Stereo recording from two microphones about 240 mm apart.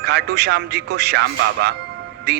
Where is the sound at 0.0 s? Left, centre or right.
Right.